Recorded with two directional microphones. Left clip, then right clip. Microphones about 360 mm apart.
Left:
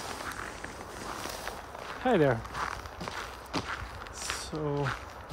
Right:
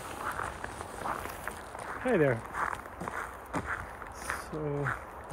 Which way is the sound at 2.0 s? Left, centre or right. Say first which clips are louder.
Left 2 dB; centre.